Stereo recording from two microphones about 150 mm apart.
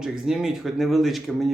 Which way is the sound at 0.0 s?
5° right (ahead or behind).